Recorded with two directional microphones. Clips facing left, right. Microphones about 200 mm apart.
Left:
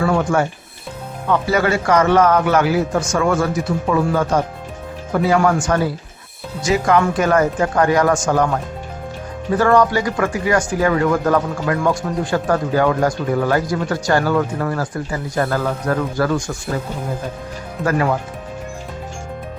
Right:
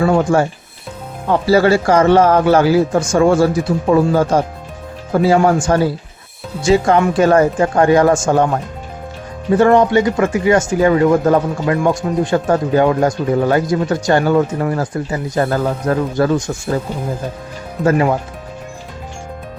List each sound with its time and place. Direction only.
0.0 s a man's voice: 30° right (ahead or behind)
9.5 s speech: 25° right (ahead or behind)
17.8 s speech: 25° right (ahead or behind)